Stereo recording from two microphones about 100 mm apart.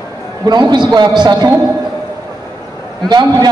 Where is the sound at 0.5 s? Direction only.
45° right (ahead or behind).